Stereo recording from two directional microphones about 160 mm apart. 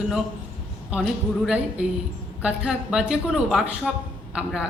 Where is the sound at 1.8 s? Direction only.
5° right (ahead or behind).